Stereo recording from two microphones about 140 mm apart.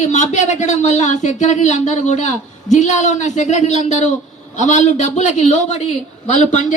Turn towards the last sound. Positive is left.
turn(degrees=65)  # may be behind; listen again after turning